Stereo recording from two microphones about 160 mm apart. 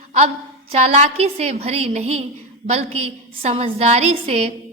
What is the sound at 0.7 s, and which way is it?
A woman's voice, 40° right (ahead or behind).